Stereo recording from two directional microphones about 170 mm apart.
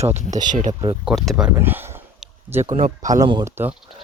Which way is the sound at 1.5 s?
15° right (ahead or behind).